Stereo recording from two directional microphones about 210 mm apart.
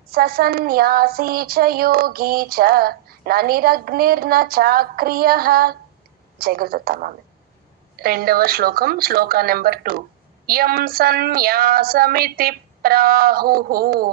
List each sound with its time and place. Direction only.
0.1 s speech: 45° right (ahead or behind)